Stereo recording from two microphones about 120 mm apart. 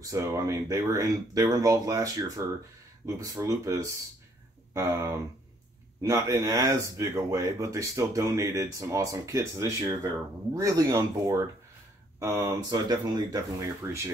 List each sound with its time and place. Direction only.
0.0 s speech: 25° right (ahead or behind)